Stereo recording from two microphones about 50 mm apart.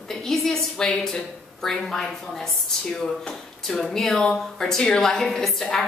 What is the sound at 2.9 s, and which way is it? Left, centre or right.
Speech, centre.